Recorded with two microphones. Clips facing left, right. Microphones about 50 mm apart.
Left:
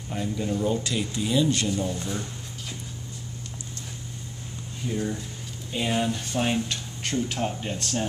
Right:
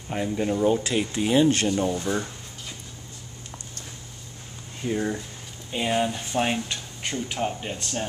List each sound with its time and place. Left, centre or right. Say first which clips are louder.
0.1 s speech: right 3 dB; right
4.8 s speech: right 3 dB; right
5.7 s speech: right 2 dB; centre